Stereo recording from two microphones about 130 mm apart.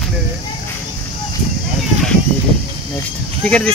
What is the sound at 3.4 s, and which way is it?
Speech, 10° left (ahead or behind).